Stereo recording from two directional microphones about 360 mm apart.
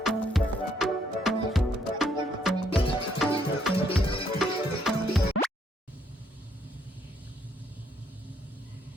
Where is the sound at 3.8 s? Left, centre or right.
Centre.